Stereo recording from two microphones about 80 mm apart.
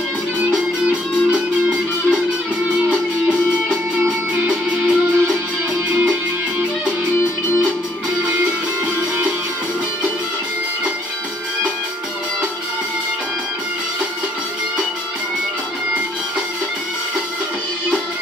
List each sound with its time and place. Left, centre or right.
0.5 s music: centre
4.4 s music: centre
7.2 s music: left